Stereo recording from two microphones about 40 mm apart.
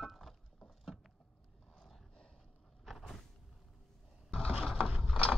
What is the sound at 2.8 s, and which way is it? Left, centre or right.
Power windows, centre.